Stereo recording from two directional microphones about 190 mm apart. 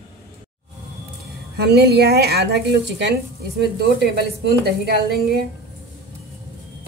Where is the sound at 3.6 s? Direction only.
60° right (ahead or behind).